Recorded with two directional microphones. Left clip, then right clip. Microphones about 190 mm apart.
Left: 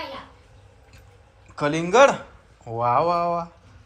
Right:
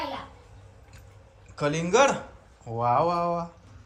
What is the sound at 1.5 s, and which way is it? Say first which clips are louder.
Speech: left 3 dB; 5° right (ahead or behind).